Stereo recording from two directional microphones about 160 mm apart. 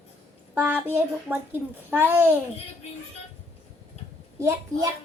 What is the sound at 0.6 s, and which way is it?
A child's voice, 10° right (ahead or behind).